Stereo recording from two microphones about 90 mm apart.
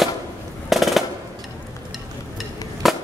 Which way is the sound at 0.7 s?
Centre (ahead or behind).